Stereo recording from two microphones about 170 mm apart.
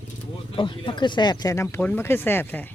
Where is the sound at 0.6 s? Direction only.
30° left (ahead or behind); by 2.7 s 10° left (ahead or behind).